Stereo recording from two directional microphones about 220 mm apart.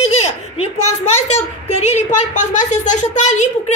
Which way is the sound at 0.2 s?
30° left (ahead or behind).